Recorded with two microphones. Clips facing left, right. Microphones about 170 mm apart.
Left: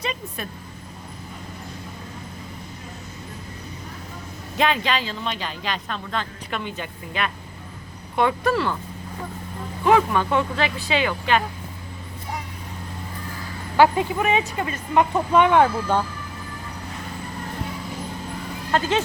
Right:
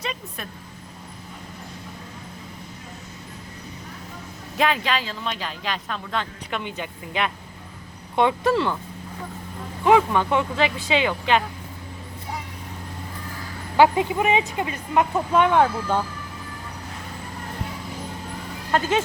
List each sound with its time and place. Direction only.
0.0 s speech: centre (ahead or behind)
4.5 s speech: 5° right (ahead or behind)
6.1 s speech: 15° right (ahead or behind)
9.8 s speech: 15° right (ahead or behind)
13.7 s speech: 20° right (ahead or behind)
15.3 s speech: centre (ahead or behind)